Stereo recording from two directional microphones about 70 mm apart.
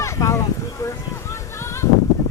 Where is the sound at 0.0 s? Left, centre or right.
Left.